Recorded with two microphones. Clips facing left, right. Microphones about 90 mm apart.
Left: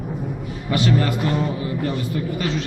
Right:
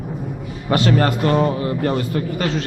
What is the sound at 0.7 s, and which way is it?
A man's voice, 50° right (ahead or behind).